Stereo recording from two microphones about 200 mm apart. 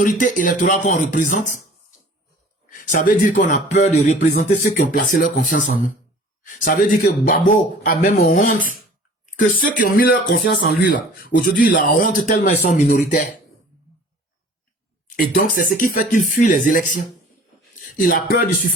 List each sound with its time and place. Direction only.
0.0 s speech: 45° left (ahead or behind)
2.6 s speech: 40° left (ahead or behind)
15.1 s speech: 45° left (ahead or behind)